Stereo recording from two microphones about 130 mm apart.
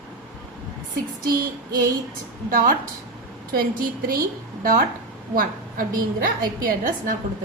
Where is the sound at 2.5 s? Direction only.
90° right.